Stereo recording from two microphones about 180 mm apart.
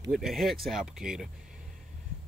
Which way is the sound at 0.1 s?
Centre (ahead or behind).